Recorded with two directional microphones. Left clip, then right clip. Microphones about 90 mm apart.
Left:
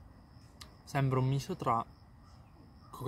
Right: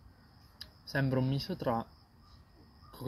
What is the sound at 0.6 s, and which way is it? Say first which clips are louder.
Speech: right 1 dB; 45° left (ahead or behind).